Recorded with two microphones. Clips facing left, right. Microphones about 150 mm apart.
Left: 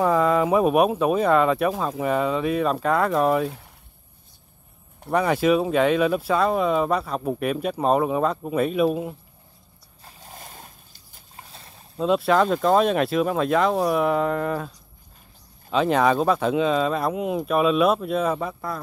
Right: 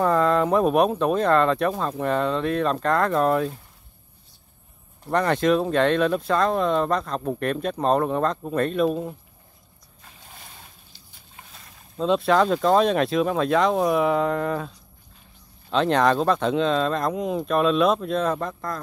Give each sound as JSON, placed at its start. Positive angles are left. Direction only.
{"t": 0.0, "sound": "speech", "side_deg": 5}
{"t": 5.1, "sound": "speech", "side_deg": 5}
{"t": 10.0, "sound": "boat", "side_deg": 40}
{"t": 12.0, "sound": "speech", "side_deg": 5}
{"t": 15.7, "sound": "speech", "side_deg": 5}